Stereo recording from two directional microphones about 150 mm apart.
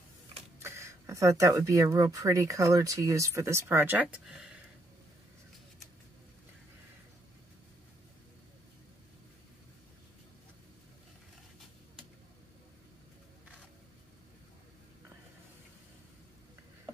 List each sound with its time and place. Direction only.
0.6 s speech: 20° right (ahead or behind)